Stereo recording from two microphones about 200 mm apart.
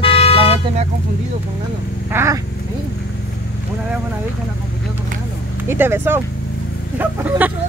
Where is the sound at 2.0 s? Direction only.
15° right (ahead or behind).